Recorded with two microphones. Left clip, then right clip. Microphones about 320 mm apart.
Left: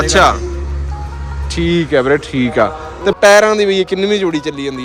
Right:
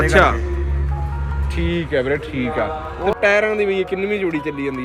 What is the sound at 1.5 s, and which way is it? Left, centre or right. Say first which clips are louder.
Speech: left 7 dB; centre.